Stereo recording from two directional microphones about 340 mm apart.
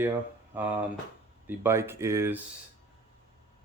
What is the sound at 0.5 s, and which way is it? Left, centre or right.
Speech, centre.